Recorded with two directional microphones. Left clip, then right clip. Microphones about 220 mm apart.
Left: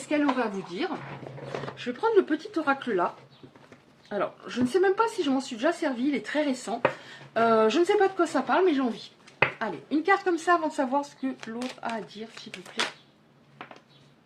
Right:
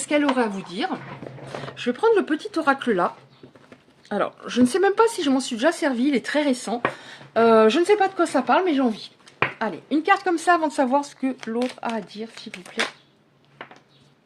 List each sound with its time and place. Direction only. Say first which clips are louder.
0.1 s speech: right 5 dB; 50° right (ahead or behind)
4.1 s speech: right 6 dB; 45° right (ahead or behind)
12.3 s speech: right 4 dB; 10° right (ahead or behind)